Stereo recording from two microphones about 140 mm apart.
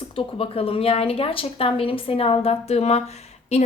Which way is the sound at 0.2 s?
45° left (ahead or behind).